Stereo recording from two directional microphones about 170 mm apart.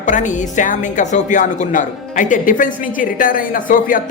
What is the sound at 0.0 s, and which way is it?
Speech, 45° left (ahead or behind).